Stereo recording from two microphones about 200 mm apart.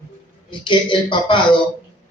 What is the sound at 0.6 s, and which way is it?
Speech, 25° left (ahead or behind).